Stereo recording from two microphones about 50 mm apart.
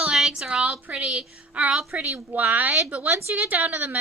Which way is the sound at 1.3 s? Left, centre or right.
Right.